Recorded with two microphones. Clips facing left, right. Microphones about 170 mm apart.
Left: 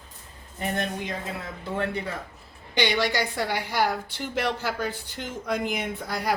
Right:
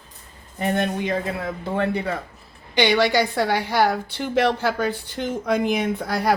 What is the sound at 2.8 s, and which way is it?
Speech, 65° right (ahead or behind).